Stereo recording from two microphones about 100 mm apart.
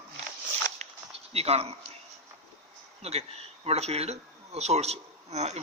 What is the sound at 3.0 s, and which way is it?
Speech, 90° right.